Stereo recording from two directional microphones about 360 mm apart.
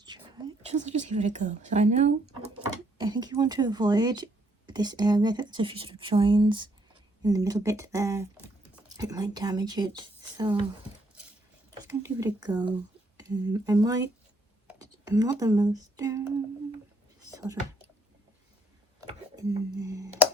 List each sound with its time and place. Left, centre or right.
0.0 s speech: centre
11.8 s speech: centre
17.3 s speech: centre
18.9 s a sound: centre